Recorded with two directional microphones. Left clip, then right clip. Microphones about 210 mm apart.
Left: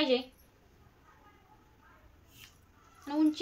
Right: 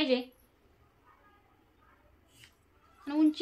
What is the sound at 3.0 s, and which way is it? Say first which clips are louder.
Speech: right 2 dB; 15° right (ahead or behind).